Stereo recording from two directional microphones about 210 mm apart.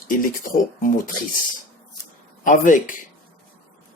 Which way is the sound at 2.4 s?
40° left (ahead or behind).